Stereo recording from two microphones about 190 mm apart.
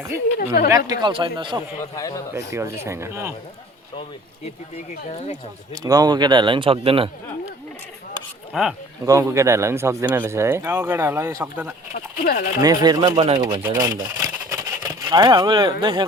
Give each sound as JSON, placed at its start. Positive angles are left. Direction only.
{"t": 0.3, "sound": "a woman's voice", "side_deg": 50}
{"t": 0.9, "sound": "speech", "side_deg": -25}
{"t": 2.0, "sound": "speech", "side_deg": 20}
{"t": 2.3, "sound": "speech", "side_deg": -15}
{"t": 5.0, "sound": "speech", "side_deg": 35}
{"t": 5.7, "sound": "speech", "side_deg": -20}
{"t": 8.5, "sound": "speech", "side_deg": 0}
{"t": 9.0, "sound": "speech", "side_deg": -15}
{"t": 12.2, "sound": "a woman's voice", "side_deg": 50}
{"t": 12.6, "sound": "speech", "side_deg": -20}